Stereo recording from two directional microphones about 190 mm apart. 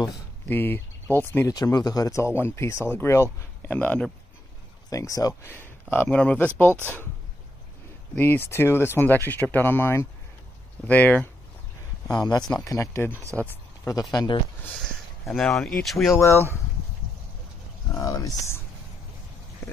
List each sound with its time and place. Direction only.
0.5 s speech: 10° left (ahead or behind)
8.2 s speech: 10° left (ahead or behind)
12.2 s speech: 20° left (ahead or behind)
13.1 s speech: 15° right (ahead or behind)
13.4 s speech: 15° left (ahead or behind)
15.2 s speech: centre (ahead or behind)
17.9 s speech: 15° left (ahead or behind)